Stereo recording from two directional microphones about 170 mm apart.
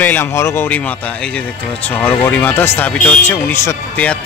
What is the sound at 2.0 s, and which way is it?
Speech, 10° left (ahead or behind).